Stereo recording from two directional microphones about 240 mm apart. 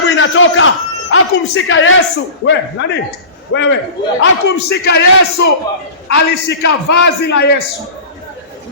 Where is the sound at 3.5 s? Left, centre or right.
Left.